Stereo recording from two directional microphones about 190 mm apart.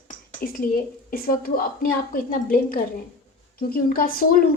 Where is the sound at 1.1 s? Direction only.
50° left (ahead or behind).